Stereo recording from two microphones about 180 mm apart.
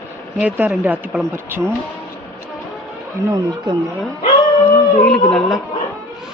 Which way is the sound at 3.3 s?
20° right (ahead or behind).